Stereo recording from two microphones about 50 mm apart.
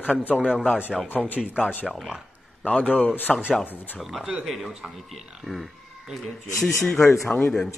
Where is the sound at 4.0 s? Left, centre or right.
Centre.